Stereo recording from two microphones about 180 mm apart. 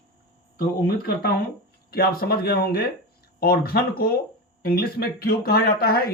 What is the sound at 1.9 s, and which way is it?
Speech, 60° left (ahead or behind).